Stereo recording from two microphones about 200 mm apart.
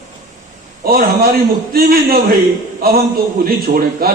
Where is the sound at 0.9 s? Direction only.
50° right (ahead or behind).